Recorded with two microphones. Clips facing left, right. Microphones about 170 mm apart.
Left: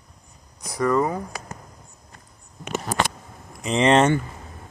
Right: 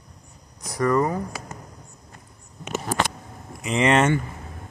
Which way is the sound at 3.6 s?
30° left (ahead or behind).